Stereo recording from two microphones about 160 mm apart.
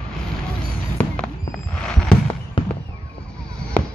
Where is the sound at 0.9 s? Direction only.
10° left (ahead or behind).